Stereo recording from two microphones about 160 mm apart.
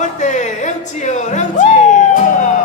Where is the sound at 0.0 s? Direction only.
50° left (ahead or behind).